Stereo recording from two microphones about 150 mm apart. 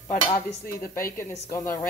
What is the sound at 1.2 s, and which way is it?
Speech, 20° left (ahead or behind).